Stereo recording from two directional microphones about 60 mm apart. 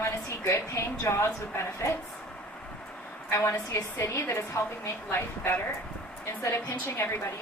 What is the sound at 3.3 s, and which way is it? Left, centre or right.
A woman's voice, left.